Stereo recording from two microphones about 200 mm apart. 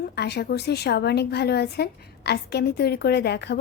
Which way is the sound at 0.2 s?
55° left (ahead or behind).